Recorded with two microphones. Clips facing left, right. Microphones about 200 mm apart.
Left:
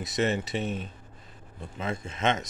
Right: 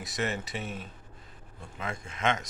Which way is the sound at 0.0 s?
20° left (ahead or behind).